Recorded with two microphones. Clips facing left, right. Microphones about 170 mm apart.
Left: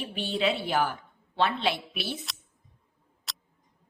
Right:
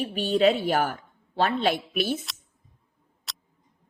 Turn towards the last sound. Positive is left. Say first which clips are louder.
# even
turn(degrees=0)  # may be behind; listen again after turning